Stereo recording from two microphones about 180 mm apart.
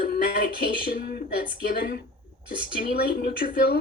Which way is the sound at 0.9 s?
60° left (ahead or behind).